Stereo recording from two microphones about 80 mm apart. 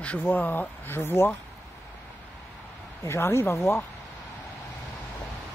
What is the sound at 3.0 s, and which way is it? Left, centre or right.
Speech, left.